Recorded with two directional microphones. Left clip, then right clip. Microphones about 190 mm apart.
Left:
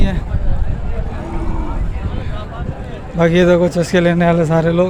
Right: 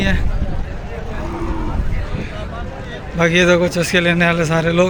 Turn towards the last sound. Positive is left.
turn(degrees=25)  # may be behind; listen again after turning